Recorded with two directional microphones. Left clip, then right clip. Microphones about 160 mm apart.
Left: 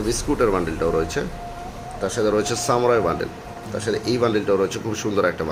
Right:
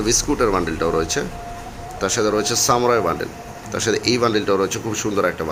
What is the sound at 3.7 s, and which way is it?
Speech, 30° right (ahead or behind).